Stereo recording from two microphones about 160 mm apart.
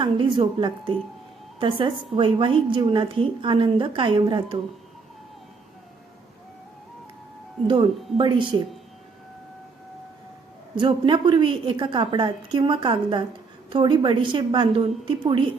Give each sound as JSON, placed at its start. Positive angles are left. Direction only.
{"t": 0.0, "sound": "a woman's voice", "side_deg": -30}
{"t": 7.7, "sound": "a woman's voice", "side_deg": -30}
{"t": 10.8, "sound": "a woman's voice", "side_deg": -30}